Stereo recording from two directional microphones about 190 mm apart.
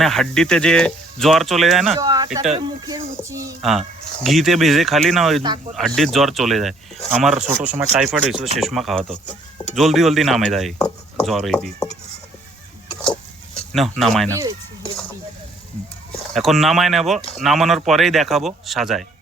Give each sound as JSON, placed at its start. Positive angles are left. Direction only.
{"t": 0.0, "sound": "speech", "side_deg": 0}
{"t": 2.0, "sound": "speech", "side_deg": -20}
{"t": 2.4, "sound": "speech", "side_deg": -35}
{"t": 2.8, "sound": "a sound", "side_deg": -20}
{"t": 3.6, "sound": "speech", "side_deg": 0}
{"t": 14.0, "sound": "speech", "side_deg": 0}
{"t": 14.3, "sound": "speech", "side_deg": -15}
{"t": 16.3, "sound": "speech", "side_deg": 0}